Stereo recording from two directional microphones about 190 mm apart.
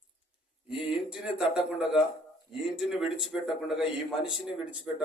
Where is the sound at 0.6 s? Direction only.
5° right (ahead or behind).